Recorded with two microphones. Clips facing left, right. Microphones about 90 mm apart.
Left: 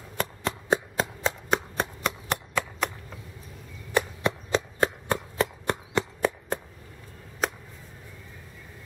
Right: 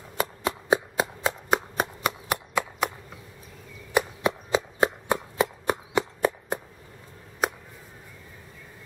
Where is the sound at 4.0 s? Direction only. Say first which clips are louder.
Right 1 dB; 10° right (ahead or behind).